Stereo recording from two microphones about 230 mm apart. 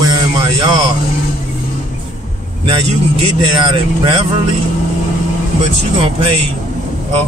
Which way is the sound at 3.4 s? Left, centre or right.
Right.